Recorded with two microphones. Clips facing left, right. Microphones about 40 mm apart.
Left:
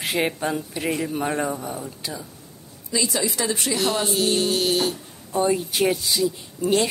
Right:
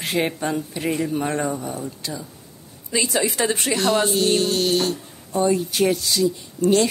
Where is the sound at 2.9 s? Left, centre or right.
Right.